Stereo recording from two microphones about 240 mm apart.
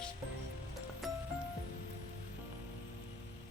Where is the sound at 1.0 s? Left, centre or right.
Centre.